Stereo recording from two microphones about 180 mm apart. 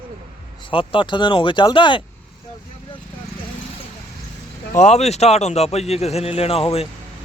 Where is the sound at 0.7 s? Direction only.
30° left (ahead or behind).